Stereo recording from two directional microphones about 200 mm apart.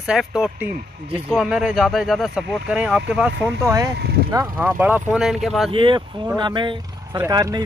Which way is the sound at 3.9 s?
55° right (ahead or behind).